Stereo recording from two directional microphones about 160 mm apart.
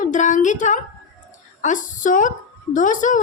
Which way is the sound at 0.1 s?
50° left (ahead or behind).